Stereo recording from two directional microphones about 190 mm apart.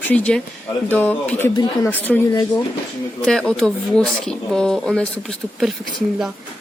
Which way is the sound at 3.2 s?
5° left (ahead or behind).